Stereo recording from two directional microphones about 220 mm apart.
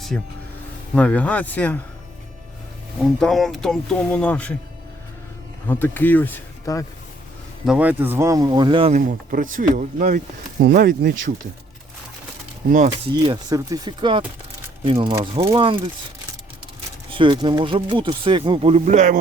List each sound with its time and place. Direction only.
0.1 s speech: 5° left (ahead or behind)
3.2 s speech: centre (ahead or behind)
5.6 s speech: 10° left (ahead or behind)
7.6 s speech: 5° right (ahead or behind); by 11.2 s 40° right (ahead or behind)
13.2 s speech: 20° right (ahead or behind)
17.1 s speech: 20° right (ahead or behind)